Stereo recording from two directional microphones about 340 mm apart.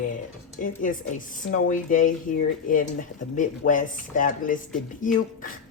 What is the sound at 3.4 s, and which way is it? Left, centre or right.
A woman's voice, left.